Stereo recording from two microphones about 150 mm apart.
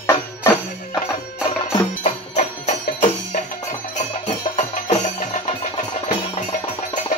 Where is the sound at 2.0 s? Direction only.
50° left (ahead or behind).